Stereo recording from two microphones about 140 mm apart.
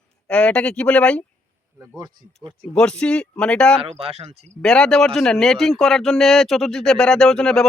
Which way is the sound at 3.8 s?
45° right (ahead or behind).